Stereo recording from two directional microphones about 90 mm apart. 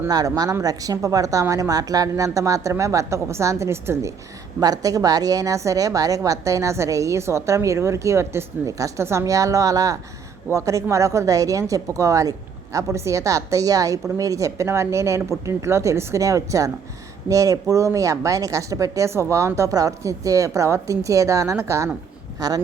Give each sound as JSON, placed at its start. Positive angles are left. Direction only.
{"t": 0.1, "sound": "a woman's voice", "side_deg": -45}
{"t": 4.6, "sound": "a woman's voice", "side_deg": -45}
{"t": 22.4, "sound": "speech", "side_deg": -45}